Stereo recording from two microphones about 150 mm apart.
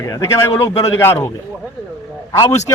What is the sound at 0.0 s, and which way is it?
A man's voice, 20° left (ahead or behind).